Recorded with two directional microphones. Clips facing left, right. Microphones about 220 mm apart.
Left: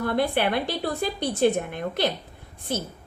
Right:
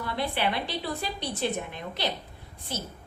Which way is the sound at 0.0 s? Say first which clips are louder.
Left 6 dB; 50° left (ahead or behind).